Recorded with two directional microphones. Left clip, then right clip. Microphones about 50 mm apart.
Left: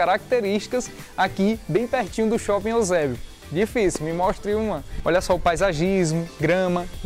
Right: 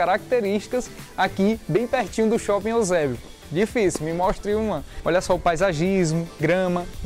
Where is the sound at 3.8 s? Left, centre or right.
Centre.